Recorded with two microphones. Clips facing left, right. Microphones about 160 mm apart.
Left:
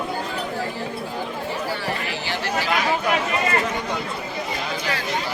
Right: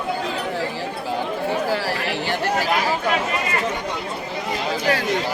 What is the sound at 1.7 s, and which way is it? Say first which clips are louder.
Chatter: right 4 dB; 90° right.